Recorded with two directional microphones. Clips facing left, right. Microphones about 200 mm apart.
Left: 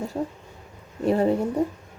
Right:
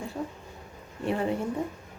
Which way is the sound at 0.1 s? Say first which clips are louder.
Left 5 dB; 40° left (ahead or behind).